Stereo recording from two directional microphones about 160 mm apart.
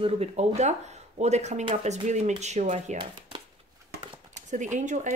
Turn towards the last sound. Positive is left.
turn(degrees=-50)  # may be behind; listen again after turning